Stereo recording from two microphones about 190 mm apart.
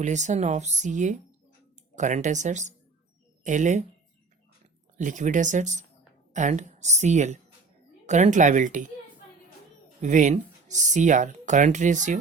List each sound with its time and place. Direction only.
0.0 s speech: 40° right (ahead or behind)
4.9 s speech: 40° right (ahead or behind)
10.0 s speech: 40° right (ahead or behind)